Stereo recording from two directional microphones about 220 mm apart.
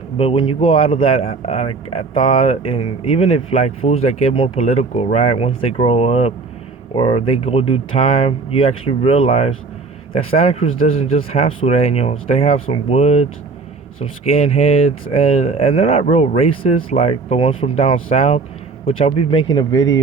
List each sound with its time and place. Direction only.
0.2 s speech: 25° left (ahead or behind)